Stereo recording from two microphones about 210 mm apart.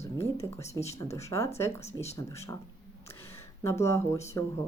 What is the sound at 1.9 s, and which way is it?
Speech, 30° left (ahead or behind).